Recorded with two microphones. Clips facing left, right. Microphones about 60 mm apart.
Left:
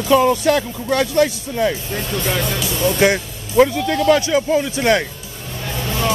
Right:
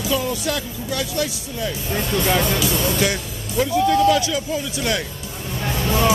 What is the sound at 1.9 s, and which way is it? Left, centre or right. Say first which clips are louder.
Speech: right 2 dB; centre.